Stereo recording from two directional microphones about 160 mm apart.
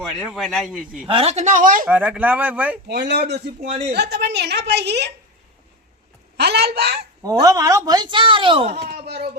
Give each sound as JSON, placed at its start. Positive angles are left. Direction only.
{"t": 0.1, "sound": "a man's voice", "side_deg": 0}
{"t": 1.0, "sound": "speech", "side_deg": -35}
{"t": 1.9, "sound": "speech", "side_deg": -10}
{"t": 2.9, "sound": "a woman's voice", "side_deg": -90}
{"t": 6.3, "sound": "a woman's voice", "side_deg": -90}
{"t": 7.2, "sound": "speech", "side_deg": -20}